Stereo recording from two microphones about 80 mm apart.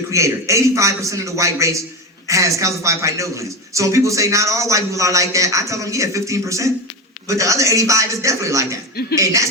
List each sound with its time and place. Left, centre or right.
0.1 s a man's voice: right